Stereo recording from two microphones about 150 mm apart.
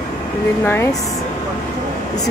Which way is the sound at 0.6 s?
15° left (ahead or behind).